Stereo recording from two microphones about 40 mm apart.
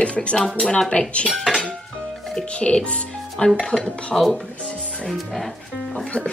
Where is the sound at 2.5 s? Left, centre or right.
Left.